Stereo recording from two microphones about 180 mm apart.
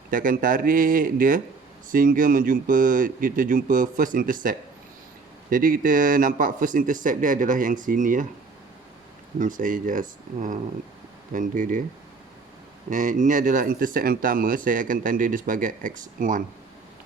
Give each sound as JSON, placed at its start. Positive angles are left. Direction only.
{"t": 0.1, "sound": "speech", "side_deg": -50}
{"t": 9.4, "sound": "speech", "side_deg": -50}
{"t": 12.9, "sound": "speech", "side_deg": -45}